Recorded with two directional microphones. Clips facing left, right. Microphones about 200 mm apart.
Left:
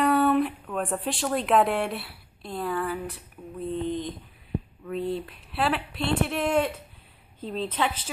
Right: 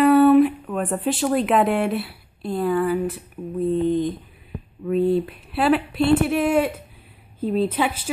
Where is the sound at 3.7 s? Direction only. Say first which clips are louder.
Right 8 dB; 45° right (ahead or behind).